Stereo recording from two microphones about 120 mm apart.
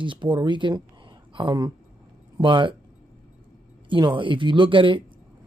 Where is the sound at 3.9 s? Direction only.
45° right (ahead or behind).